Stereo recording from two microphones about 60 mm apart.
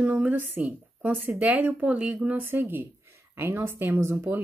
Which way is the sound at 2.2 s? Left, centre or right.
Right.